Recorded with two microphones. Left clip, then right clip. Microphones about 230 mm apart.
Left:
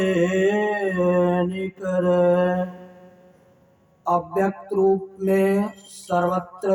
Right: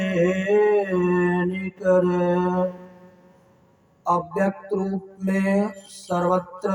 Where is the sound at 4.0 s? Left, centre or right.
Centre.